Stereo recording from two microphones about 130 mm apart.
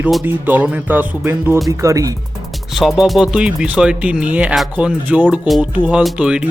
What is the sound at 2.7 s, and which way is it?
Speech, centre (ahead or behind).